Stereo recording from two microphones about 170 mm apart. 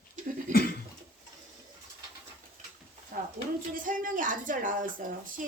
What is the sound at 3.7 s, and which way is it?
A woman's voice, 55° right (ahead or behind).